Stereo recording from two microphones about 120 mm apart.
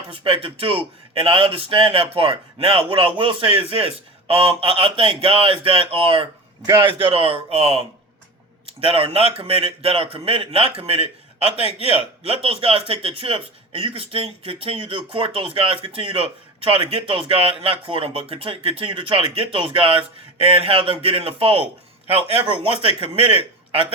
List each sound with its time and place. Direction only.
0.1 s speech: 50° right (ahead or behind)